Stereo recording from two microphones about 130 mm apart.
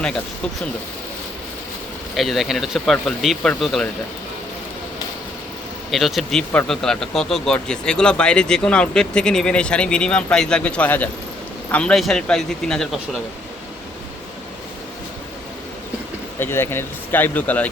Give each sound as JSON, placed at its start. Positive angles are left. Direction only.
{"t": 2.1, "sound": "speech", "side_deg": 0}
{"t": 5.9, "sound": "speech", "side_deg": 0}
{"t": 16.4, "sound": "speech", "side_deg": 20}